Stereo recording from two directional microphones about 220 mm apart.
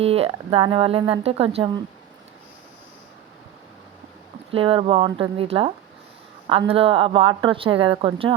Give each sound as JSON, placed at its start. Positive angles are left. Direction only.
{"t": 0.0, "sound": "speech", "side_deg": -25}
{"t": 4.5, "sound": "speech", "side_deg": -25}